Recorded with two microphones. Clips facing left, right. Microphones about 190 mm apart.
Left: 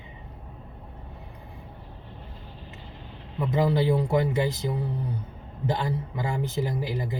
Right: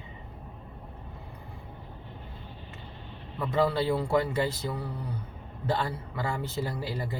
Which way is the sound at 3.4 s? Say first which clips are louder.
Left 2 dB; 15° left (ahead or behind).